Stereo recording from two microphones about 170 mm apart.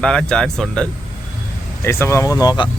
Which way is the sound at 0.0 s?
5° left (ahead or behind).